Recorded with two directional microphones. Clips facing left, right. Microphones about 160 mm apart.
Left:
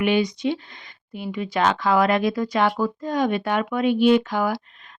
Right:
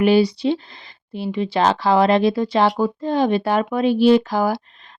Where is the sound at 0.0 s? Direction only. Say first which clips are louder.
Right 5 dB; 35° right (ahead or behind).